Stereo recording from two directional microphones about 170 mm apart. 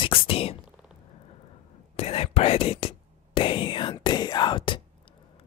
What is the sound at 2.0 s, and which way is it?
Speech, 35° left (ahead or behind).